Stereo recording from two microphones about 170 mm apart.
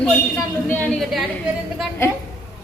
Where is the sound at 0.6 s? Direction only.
10° left (ahead or behind).